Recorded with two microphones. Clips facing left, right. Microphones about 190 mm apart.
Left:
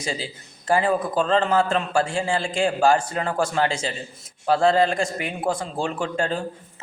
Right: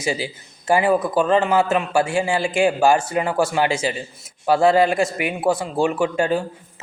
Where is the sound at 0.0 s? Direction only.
10° right (ahead or behind).